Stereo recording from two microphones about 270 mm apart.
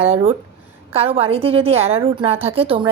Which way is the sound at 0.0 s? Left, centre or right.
Right.